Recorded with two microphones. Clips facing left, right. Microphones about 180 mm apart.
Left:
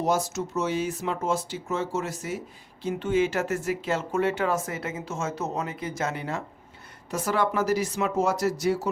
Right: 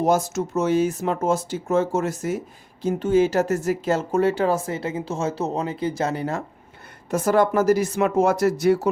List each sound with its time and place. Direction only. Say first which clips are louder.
0.0 s speech: right 5 dB; 50° right (ahead or behind)